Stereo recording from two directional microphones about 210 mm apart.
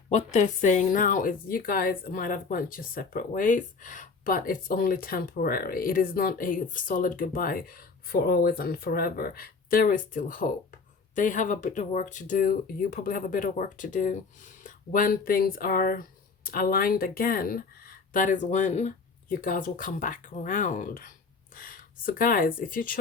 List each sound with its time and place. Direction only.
0.1 s speech: 35° left (ahead or behind)